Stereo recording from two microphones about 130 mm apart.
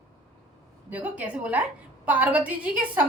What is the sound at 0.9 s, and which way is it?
A woman's voice, 10° right (ahead or behind).